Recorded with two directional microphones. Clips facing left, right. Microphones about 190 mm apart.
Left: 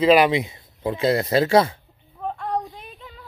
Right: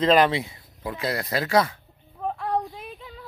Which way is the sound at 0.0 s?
10° left (ahead or behind).